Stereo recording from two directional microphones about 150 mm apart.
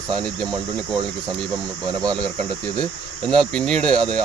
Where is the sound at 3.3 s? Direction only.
5° left (ahead or behind).